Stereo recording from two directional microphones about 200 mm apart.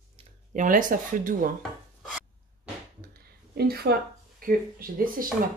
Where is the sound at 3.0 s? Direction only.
50° right (ahead or behind).